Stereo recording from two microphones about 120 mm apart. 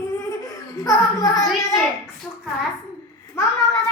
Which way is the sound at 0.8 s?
30° left (ahead or behind).